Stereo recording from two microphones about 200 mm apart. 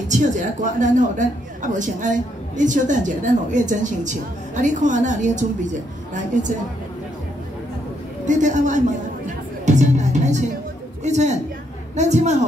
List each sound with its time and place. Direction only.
0.1 s a woman's voice: 40° right (ahead or behind)
8.3 s a woman's voice: 40° right (ahead or behind)